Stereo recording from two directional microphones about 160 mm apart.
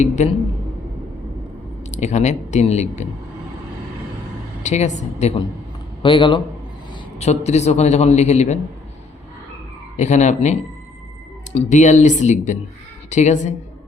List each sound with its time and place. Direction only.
0.2 s a man's voice: 45° left (ahead or behind)
1.9 s a man's voice: 45° left (ahead or behind)
4.6 s a man's voice: 45° left (ahead or behind)
6.0 s a man's voice: 30° left (ahead or behind)
7.2 s a man's voice: 45° left (ahead or behind)
10.0 s a man's voice: 45° left (ahead or behind)